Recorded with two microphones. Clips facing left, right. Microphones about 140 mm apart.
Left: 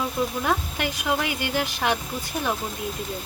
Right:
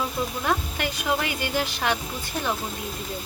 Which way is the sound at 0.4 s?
15° left (ahead or behind).